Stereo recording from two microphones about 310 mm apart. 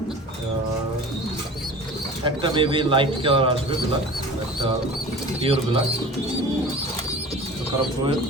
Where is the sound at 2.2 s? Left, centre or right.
Centre.